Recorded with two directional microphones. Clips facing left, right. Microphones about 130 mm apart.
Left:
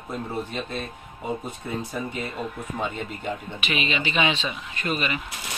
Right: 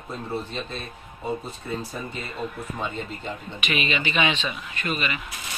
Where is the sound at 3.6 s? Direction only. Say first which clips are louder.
Right 1 dB; 30° left (ahead or behind).